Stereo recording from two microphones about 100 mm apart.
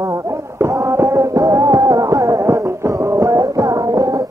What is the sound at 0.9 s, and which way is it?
Music, 30° right (ahead or behind).